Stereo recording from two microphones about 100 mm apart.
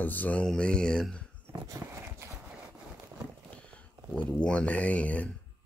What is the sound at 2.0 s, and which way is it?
Horse, 25° right (ahead or behind).